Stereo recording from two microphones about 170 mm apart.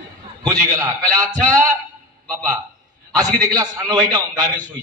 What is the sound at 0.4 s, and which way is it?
Speech, 20° right (ahead or behind).